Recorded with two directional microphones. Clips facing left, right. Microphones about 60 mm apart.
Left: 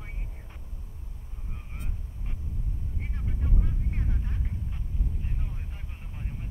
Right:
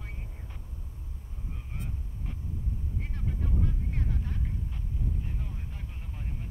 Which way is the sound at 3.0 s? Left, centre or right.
Centre.